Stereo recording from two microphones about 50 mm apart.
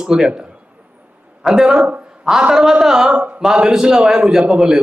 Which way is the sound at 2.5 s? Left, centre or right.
Centre.